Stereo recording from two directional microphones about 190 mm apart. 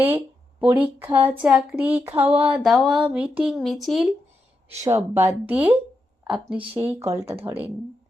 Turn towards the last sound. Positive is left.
turn(degrees=-10)  # may be behind; listen again after turning